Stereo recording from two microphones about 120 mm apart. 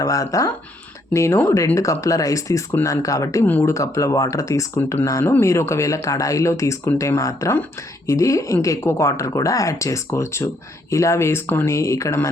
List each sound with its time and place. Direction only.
0.0 s speech: 30° left (ahead or behind)